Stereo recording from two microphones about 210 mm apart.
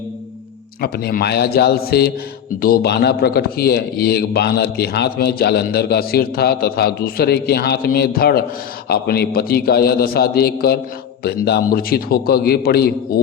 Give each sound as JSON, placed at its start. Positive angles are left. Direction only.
{"t": 0.8, "sound": "a man's voice", "side_deg": 45}